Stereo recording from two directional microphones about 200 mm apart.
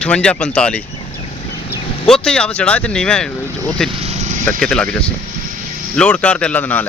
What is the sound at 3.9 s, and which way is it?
Vehicle, 30° right (ahead or behind).